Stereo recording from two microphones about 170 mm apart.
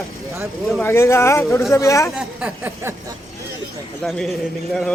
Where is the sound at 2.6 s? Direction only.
15° right (ahead or behind).